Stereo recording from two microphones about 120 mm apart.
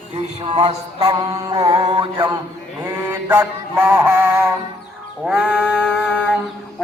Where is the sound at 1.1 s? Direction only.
35° right (ahead or behind).